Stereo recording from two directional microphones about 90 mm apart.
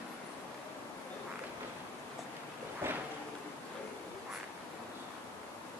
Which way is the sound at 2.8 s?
25° right (ahead or behind).